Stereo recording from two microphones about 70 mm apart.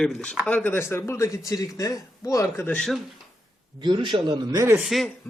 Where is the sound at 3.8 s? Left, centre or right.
Right.